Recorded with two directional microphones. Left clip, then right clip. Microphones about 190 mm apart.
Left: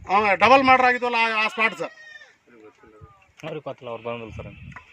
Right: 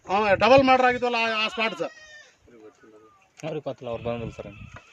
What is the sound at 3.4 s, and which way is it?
Speech, 85° right.